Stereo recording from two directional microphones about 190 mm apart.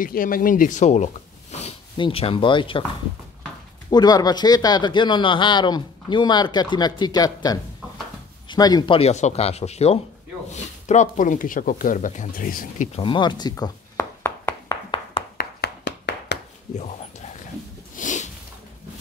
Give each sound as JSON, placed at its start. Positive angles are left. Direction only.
{"t": 0.0, "sound": "speech", "side_deg": 50}
{"t": 3.9, "sound": "a man's voice", "side_deg": 20}
{"t": 15.3, "sound": "a sound", "side_deg": 60}
{"t": 16.7, "sound": "dog", "side_deg": 35}
{"t": 17.9, "sound": "sniff", "side_deg": 40}